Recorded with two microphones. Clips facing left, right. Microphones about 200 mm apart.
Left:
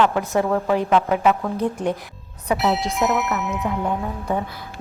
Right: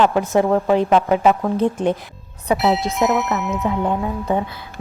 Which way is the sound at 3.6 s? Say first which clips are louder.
Right 4 dB; 25° right (ahead or behind).